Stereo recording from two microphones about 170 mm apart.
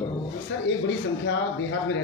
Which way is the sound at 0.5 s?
90° left.